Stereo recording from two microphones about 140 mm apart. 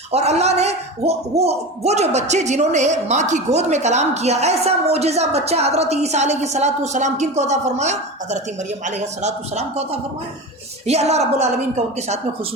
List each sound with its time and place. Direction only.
0.1 s a man's voice: 50° right (ahead or behind)